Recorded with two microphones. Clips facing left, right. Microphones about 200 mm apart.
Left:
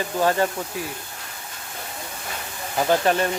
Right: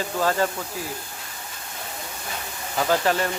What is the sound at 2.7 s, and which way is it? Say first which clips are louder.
Speech: left 2 dB; 20° left (ahead or behind).